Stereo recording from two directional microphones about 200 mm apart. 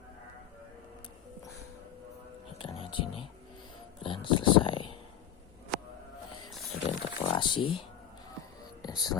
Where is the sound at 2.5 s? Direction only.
25° left (ahead or behind).